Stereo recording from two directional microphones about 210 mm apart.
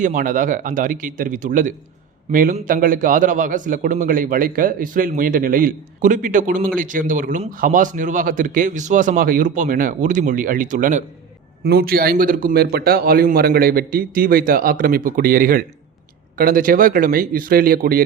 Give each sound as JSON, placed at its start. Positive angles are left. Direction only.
{"t": 0.0, "sound": "a man's voice", "side_deg": -40}
{"t": 11.6, "sound": "a man's voice", "side_deg": -50}